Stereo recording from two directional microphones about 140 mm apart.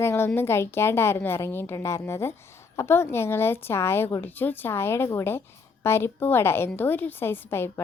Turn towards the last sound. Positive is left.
turn(degrees=15)  # may be behind; listen again after turning